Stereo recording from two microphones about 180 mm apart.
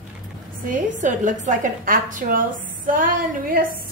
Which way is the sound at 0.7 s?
45° right (ahead or behind).